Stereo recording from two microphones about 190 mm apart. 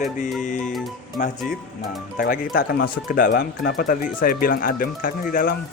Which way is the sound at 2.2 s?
50° left (ahead or behind).